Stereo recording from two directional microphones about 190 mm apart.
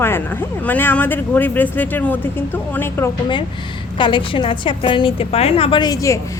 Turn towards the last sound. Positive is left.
turn(degrees=20)  # may be behind; listen again after turning